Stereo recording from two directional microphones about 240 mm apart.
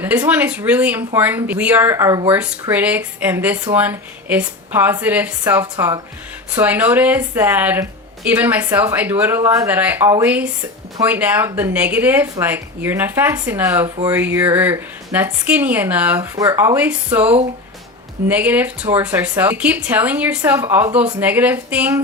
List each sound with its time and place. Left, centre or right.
0.0 s speech: centre
13.8 s speech: right
14.1 s speech: centre